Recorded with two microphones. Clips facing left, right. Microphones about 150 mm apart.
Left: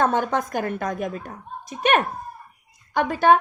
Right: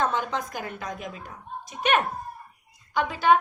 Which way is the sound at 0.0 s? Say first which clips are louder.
Left 5 dB; 55° left (ahead or behind).